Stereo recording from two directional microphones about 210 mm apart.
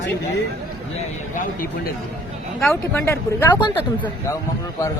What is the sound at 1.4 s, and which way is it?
Speech, 45° left (ahead or behind).